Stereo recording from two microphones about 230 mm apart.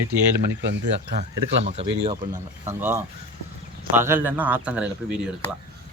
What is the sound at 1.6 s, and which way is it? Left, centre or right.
Speech, right.